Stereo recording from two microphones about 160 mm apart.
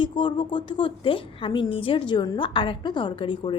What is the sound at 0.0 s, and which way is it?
A woman's voice, 30° left (ahead or behind).